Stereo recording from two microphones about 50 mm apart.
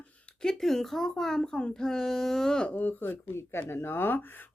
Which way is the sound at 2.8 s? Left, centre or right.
Left.